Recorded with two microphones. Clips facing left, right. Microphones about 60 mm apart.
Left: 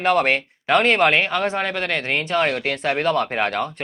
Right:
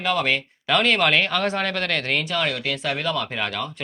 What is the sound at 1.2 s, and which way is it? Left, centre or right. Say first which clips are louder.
Speech: left 1 dB; centre.